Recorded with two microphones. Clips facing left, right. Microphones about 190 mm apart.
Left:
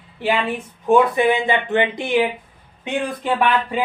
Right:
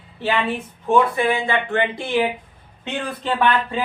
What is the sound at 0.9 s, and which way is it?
Speech, 15° left (ahead or behind).